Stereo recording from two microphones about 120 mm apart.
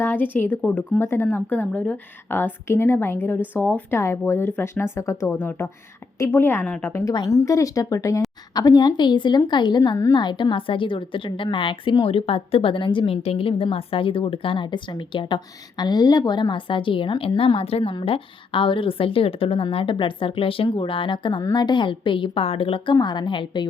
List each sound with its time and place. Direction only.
0.0 s a woman's voice: 15° left (ahead or behind)
7.0 s a woman's voice: 30° left (ahead or behind)